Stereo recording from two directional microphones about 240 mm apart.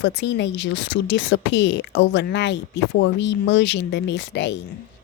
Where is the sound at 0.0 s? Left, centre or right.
Left.